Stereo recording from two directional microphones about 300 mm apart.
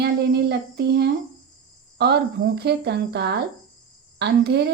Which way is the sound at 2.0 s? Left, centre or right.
Right.